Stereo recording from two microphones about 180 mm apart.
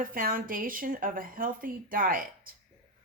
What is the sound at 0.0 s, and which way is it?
A woman's voice, 50° right (ahead or behind).